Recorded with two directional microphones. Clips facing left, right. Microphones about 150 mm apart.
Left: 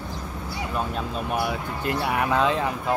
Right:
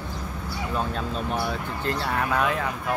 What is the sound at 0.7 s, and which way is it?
Speech, 5° left (ahead or behind).